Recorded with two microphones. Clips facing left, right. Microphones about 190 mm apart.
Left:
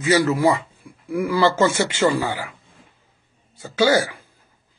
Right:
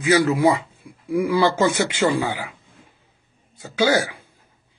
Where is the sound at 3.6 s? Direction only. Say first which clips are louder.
Left 2 dB; 10° right (ahead or behind).